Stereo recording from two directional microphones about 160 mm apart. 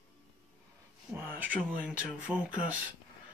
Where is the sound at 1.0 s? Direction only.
10° right (ahead or behind).